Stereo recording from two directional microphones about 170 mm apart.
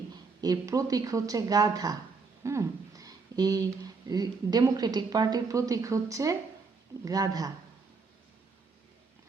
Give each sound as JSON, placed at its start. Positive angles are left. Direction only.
{"t": 0.4, "sound": "speech", "side_deg": -20}
{"t": 2.4, "sound": "a sound", "side_deg": -15}
{"t": 4.0, "sound": "speech", "side_deg": -25}